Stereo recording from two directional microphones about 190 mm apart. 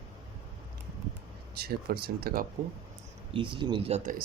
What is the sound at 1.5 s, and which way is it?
Speech, 55° right (ahead or behind).